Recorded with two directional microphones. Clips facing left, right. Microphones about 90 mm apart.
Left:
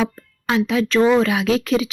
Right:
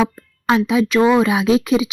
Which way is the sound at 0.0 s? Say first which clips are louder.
Right 4 dB; 20° right (ahead or behind).